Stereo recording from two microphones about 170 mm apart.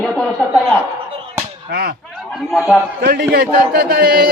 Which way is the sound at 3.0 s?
65° right (ahead or behind).